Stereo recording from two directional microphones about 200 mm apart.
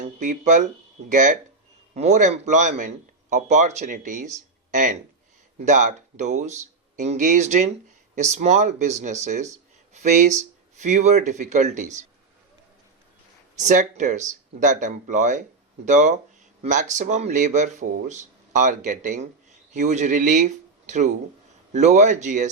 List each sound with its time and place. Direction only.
0.2 s speech: 40° right (ahead or behind)
13.6 s speech: 35° right (ahead or behind)